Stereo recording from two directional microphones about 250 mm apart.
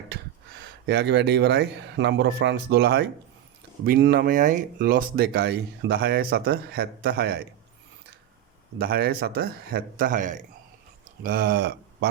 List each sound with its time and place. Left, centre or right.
0.9 s speech: right
8.8 s speech: right